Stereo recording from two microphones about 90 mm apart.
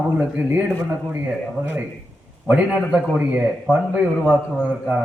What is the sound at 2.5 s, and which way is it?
A man's voice, 15° right (ahead or behind).